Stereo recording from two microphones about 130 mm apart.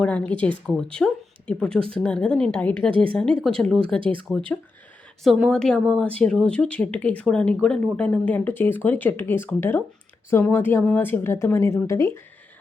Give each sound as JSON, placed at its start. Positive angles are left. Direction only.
{"t": 0.0, "sound": "a woman's voice", "side_deg": 10}
{"t": 4.0, "sound": "speech", "side_deg": -40}
{"t": 4.3, "sound": "a woman's voice", "side_deg": 5}